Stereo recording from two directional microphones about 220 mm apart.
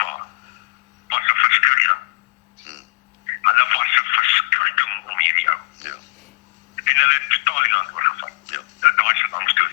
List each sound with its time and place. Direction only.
1.1 s a sound: 35° left (ahead or behind)
3.4 s telephone: 35° left (ahead or behind)
6.7 s telephone: 35° left (ahead or behind)